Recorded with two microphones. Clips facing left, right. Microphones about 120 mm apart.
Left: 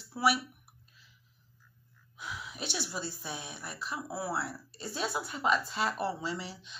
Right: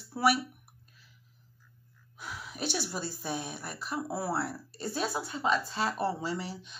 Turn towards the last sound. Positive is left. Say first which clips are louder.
# right 2 dB
turn(degrees=-45)  # may be behind; listen again after turning